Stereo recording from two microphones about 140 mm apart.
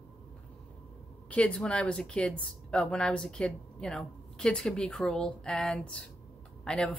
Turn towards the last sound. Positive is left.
turn(degrees=5)  # may be behind; listen again after turning